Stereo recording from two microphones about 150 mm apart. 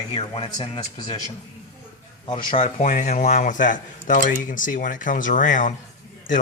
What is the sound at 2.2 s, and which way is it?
Speech, 30° left (ahead or behind).